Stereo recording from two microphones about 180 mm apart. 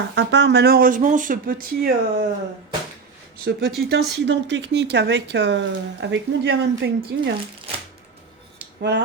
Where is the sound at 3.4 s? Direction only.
60° right (ahead or behind).